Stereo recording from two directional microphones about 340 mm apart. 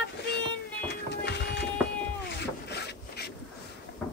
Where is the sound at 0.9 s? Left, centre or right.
Left.